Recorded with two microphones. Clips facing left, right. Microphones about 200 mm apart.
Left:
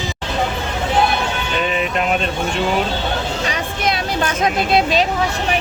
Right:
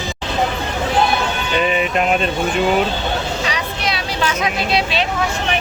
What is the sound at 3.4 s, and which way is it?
Vehicle, 50° left (ahead or behind).